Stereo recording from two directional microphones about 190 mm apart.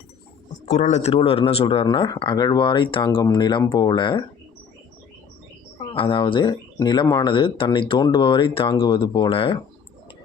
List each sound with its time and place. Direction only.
0.7 s speech: 35° left (ahead or behind)
5.9 s speech: 25° left (ahead or behind)